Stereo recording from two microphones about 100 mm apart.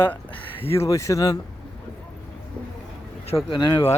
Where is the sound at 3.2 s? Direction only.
75° left (ahead or behind).